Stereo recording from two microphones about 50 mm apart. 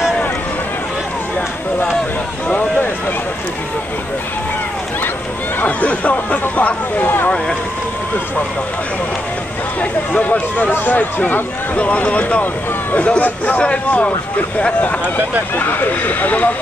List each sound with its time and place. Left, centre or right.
5.6 s speech: left
9.8 s speech: left
15.5 s speech: left